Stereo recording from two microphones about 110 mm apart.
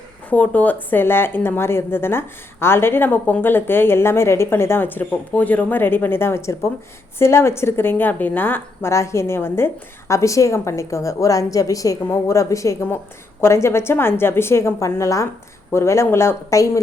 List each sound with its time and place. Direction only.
0.3 s a woman's voice: 15° left (ahead or behind)